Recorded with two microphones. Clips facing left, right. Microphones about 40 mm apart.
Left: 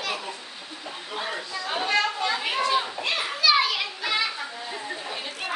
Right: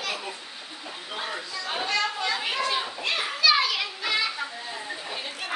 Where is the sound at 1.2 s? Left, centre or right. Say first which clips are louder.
Left 2 dB; centre.